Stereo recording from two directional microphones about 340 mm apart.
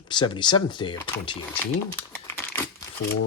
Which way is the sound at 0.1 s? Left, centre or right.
Centre.